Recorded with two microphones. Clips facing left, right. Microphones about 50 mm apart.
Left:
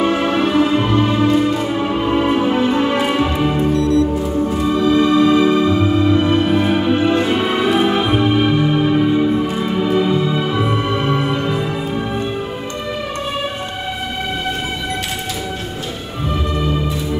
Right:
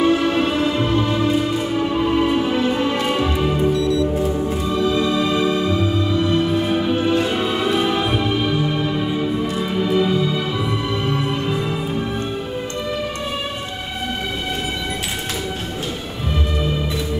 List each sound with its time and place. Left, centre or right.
0.0 s music: left
3.7 s music: left
4.6 s organ: left
4.9 s music: left
6.1 s music: left
7.8 s music: left
9.1 s music: centre; by 11.5 s left